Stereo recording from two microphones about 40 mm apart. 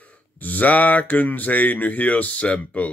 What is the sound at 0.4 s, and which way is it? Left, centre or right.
Speech, left.